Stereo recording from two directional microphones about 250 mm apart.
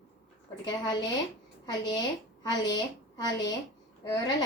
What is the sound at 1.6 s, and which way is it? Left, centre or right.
A woman's voice, centre.